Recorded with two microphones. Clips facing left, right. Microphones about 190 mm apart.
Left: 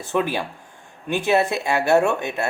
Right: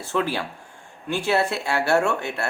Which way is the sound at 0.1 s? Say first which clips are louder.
Left 2 dB; 15° left (ahead or behind).